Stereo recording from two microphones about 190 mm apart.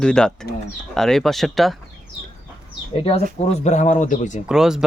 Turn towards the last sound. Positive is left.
turn(degrees=-5)  # may be behind; listen again after turning